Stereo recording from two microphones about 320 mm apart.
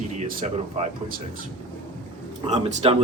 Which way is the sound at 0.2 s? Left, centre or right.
Right.